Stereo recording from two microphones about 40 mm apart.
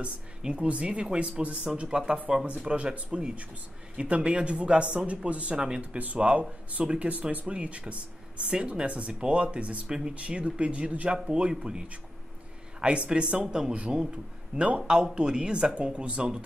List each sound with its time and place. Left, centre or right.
0.4 s speech: right
1.9 s speech: right
5.6 s speech: right
9.8 s speech: centre
10.1 s speech: right
12.8 s a man's voice: right